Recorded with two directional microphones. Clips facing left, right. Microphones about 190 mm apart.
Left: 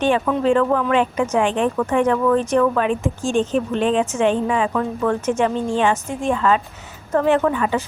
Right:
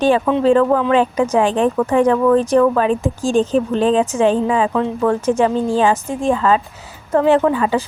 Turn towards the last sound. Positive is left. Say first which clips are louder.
# right 3 dB
turn(degrees=-30)  # may be behind; listen again after turning